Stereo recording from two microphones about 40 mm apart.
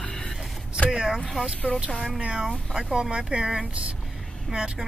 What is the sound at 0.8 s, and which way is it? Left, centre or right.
Vehicle, right.